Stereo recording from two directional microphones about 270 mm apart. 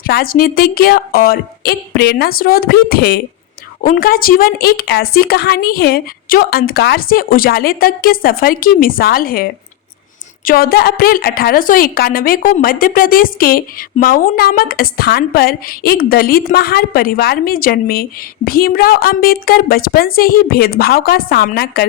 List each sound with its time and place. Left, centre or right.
0.0 s a woman's voice: left